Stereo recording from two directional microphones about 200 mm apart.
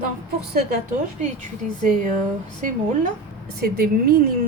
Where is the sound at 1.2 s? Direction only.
40° right (ahead or behind).